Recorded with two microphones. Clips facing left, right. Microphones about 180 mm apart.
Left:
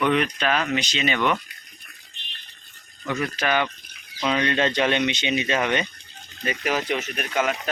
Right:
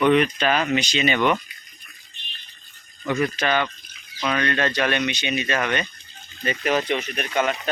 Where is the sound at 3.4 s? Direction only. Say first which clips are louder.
Right 1 dB; 10° left (ahead or behind).